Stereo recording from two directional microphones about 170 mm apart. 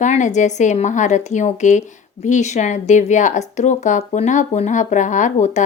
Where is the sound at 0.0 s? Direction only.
45° left (ahead or behind).